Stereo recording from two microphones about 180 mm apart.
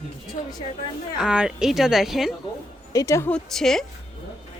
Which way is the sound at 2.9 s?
20° left (ahead or behind).